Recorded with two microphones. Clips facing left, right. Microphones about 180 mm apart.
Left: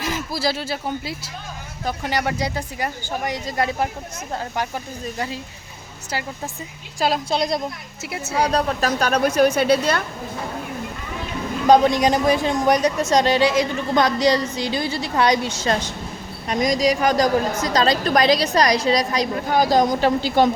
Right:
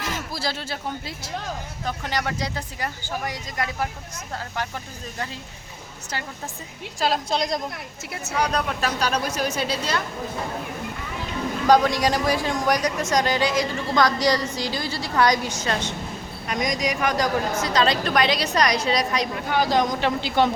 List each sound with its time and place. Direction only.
0.0 s a man's voice: 10° left (ahead or behind)
7.0 s a woman's voice: 10° left (ahead or behind)
8.4 s a woman's voice: 35° left (ahead or behind)
9.0 s speech: 55° left (ahead or behind)
11.7 s a woman's voice: 20° left (ahead or behind); by 20.5 s 40° left (ahead or behind)